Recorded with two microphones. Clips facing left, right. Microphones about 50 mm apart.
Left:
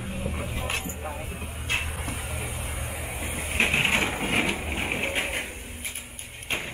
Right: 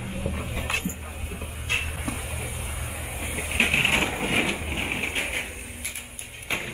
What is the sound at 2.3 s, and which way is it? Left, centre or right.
Music, centre.